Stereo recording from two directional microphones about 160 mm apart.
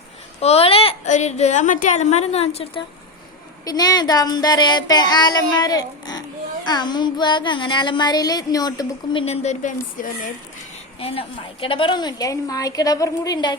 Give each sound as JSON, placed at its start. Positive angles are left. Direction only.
{"t": 0.3, "sound": "a woman's voice", "side_deg": 40}
{"t": 3.7, "sound": "a woman's voice", "side_deg": 25}
{"t": 9.2, "sound": "a woman's voice", "side_deg": 40}
{"t": 11.0, "sound": "a woman's voice", "side_deg": 35}